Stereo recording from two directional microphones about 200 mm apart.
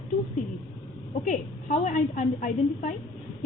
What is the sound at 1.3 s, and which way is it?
A woman's voice, 35° left (ahead or behind).